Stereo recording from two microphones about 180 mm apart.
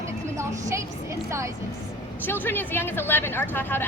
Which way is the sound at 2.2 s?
10° left (ahead or behind).